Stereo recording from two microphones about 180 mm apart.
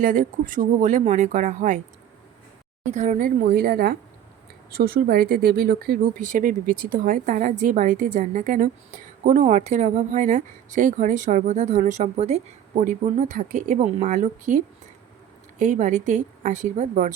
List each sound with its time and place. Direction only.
0.0 s speech: 50° right (ahead or behind)
2.9 s a woman's voice: 40° right (ahead or behind)